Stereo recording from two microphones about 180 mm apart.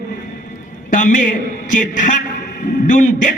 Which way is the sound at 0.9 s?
45° left (ahead or behind).